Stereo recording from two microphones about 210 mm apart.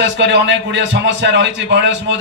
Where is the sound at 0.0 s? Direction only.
60° right (ahead or behind).